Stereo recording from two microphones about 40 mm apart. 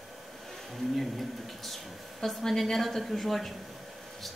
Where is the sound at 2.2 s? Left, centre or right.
Centre.